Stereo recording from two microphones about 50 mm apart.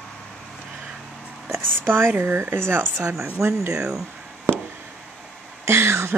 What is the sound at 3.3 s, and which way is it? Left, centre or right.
Speech, right.